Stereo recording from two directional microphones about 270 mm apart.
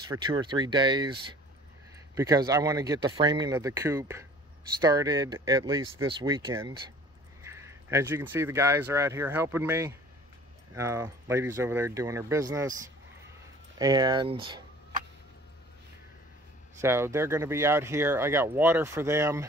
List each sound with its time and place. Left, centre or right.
0.3 s speech: centre
13.7 s speech: centre
16.8 s speech: centre